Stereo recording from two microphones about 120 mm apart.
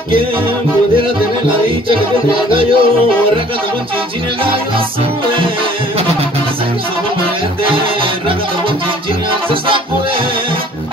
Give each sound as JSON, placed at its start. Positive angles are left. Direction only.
{"t": 1.9, "sound": "music", "side_deg": -45}
{"t": 7.6, "sound": "music", "side_deg": -45}